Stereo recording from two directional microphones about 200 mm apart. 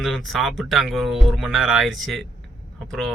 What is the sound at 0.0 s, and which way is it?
A man's voice, centre (ahead or behind).